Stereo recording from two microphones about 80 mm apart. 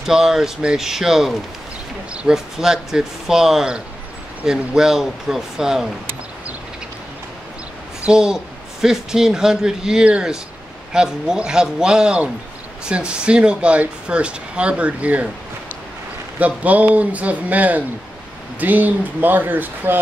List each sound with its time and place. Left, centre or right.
0.0 s speech: centre
8.0 s a woman's voice: centre
16.3 s a man's voice: centre